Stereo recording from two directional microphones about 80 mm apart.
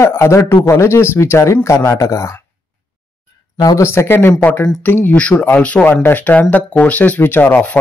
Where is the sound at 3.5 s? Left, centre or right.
Left.